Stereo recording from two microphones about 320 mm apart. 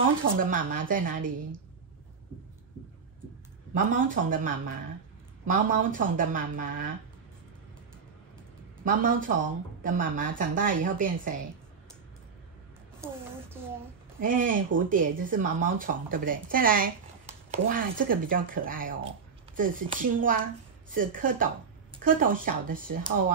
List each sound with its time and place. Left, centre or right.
0.2 s speech: right
3.7 s speech: right
8.8 s speech: right
13.0 s a sound: centre
14.2 s speech: right